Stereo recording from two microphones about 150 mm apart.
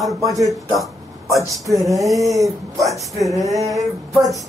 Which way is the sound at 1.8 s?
Centre (ahead or behind).